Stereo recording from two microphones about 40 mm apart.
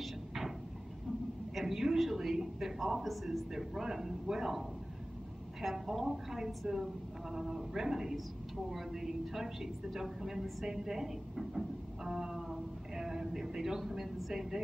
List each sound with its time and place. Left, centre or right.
1.5 s speech: centre